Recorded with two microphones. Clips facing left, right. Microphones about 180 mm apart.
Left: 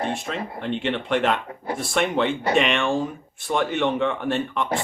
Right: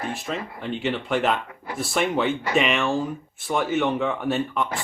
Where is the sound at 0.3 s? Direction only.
Centre (ahead or behind).